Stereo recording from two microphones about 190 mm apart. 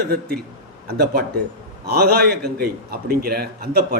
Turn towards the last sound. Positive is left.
turn(degrees=-55)  # may be behind; listen again after turning